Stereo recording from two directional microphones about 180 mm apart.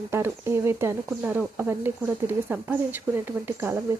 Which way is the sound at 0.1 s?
15° right (ahead or behind).